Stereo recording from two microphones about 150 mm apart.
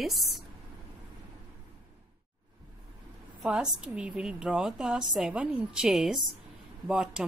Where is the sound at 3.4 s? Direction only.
5° right (ahead or behind).